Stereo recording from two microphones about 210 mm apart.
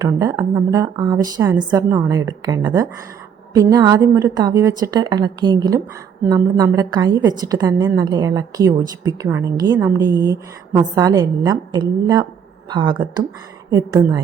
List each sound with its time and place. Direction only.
0.0 s a woman's voice: 15° right (ahead or behind)